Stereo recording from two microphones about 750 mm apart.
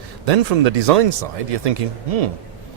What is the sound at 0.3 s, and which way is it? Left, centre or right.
Speech, right.